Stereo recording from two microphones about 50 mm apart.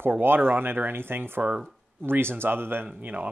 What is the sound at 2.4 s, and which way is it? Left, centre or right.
Speech, right.